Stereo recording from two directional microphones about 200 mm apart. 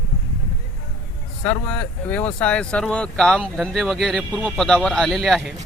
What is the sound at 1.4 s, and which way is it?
Speech, 5° left (ahead or behind).